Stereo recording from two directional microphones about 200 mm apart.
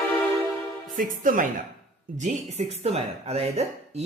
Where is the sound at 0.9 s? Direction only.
40° right (ahead or behind).